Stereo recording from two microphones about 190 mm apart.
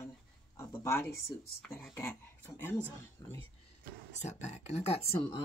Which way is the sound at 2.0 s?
10° left (ahead or behind).